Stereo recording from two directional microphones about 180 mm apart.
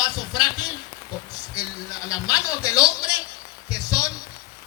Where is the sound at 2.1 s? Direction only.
20° left (ahead or behind).